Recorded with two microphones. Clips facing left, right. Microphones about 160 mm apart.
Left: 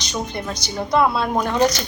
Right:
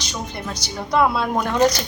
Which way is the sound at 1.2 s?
5° left (ahead or behind).